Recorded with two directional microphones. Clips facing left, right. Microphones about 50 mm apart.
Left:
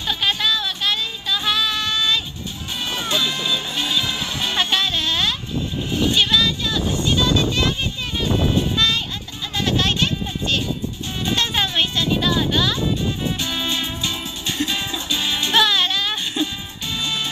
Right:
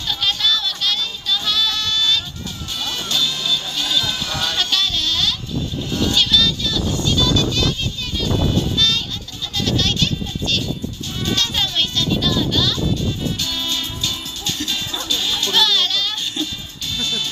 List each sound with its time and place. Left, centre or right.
0.0 s music: left
9.6 s a sound: left
11.2 s music: left